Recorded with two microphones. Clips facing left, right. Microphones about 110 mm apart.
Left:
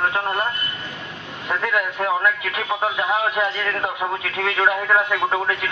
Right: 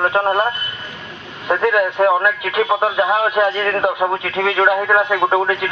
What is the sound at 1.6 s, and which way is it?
Speech, 10° right (ahead or behind).